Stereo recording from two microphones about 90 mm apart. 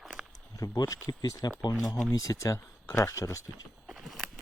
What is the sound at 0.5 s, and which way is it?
Speech, 35° left (ahead or behind).